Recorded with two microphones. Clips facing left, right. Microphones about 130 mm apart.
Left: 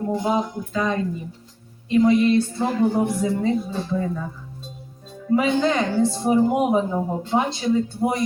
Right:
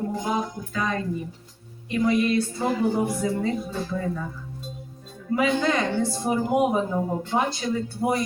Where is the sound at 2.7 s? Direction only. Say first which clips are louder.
Left 4 dB; 5° right (ahead or behind).